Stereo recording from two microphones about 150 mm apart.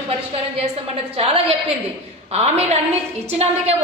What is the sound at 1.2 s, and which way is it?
A woman's voice, 40° right (ahead or behind).